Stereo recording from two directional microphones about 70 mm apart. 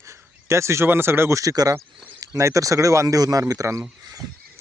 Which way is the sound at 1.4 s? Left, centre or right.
Right.